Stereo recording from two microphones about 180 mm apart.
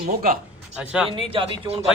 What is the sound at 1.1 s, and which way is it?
Speech, 30° right (ahead or behind).